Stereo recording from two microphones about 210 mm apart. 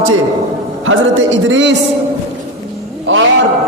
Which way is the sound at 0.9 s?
65° right (ahead or behind).